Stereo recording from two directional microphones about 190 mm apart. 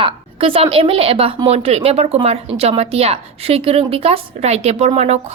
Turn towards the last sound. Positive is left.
turn(degrees=-35)  # may be behind; listen again after turning